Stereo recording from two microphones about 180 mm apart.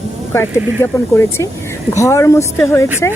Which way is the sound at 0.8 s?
15° left (ahead or behind).